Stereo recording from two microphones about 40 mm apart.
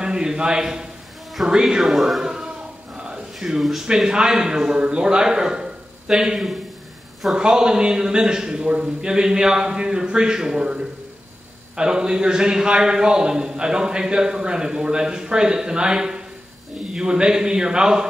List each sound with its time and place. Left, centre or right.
0.0 s a man's voice: centre
1.8 s speech: centre
3.8 s a man's voice: centre
7.3 s a man's voice: right